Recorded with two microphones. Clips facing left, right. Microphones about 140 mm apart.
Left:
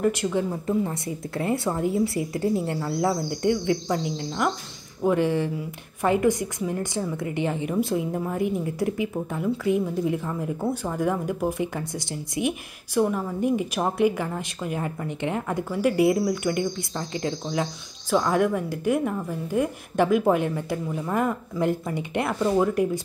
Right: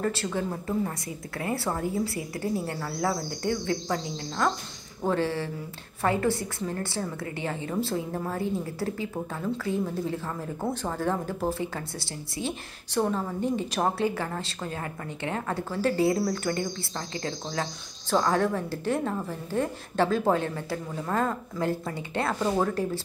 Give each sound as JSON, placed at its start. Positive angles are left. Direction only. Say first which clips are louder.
{"t": 0.0, "sound": "a woman's voice", "louder": "left 5 dB", "side_deg": 15}